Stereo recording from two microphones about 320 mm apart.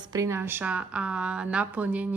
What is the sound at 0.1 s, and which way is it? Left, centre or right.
Speech, centre.